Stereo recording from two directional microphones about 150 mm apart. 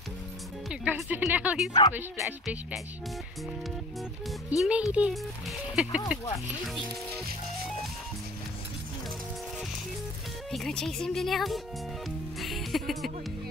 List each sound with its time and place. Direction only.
0.7 s speech: 5° right (ahead or behind)
1.7 s speech: 25° left (ahead or behind)
2.4 s speech: centre (ahead or behind)
4.3 s speech: 5° right (ahead or behind)
10.5 s speech: 5° left (ahead or behind)
12.4 s music: centre (ahead or behind)